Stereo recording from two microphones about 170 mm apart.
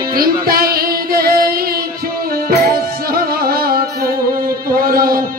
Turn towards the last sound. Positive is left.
turn(degrees=-60)  # may be behind; listen again after turning